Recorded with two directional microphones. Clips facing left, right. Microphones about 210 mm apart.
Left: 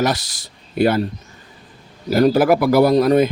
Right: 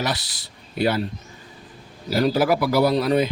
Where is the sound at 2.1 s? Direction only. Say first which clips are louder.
Left 5 dB; 50° left (ahead or behind).